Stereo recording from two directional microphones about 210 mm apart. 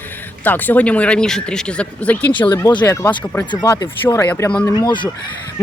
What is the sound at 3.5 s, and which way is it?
Speech, 20° left (ahead or behind).